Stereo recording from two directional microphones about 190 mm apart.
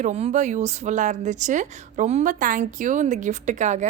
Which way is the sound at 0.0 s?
35° right (ahead or behind).